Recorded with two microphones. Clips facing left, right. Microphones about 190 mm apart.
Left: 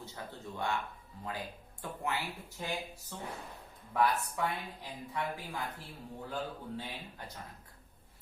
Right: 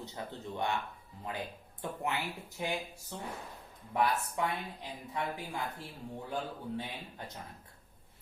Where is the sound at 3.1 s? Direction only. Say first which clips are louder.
Right 2 dB; 20° right (ahead or behind).